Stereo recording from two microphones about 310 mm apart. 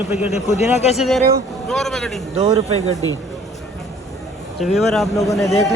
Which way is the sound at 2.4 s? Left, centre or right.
Centre.